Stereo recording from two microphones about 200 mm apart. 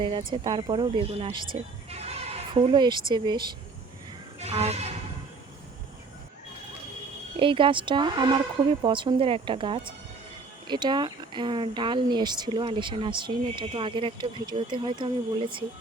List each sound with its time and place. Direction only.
0.4 s speech: 25° right (ahead or behind)
7.3 s speech: 25° right (ahead or behind)